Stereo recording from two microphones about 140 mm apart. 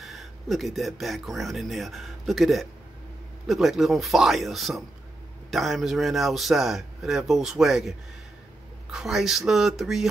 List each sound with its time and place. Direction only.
0.0 s speech: centre (ahead or behind)
8.9 s speech: centre (ahead or behind)